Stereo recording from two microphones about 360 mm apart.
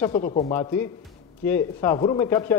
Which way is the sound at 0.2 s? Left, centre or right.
Centre.